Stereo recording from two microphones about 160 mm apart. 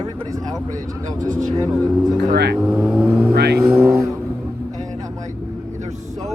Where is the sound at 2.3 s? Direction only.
90° right.